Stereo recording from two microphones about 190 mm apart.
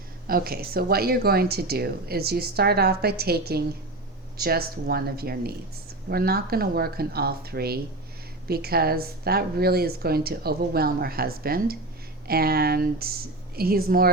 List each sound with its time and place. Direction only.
0.3 s a woman's voice: 50° right (ahead or behind)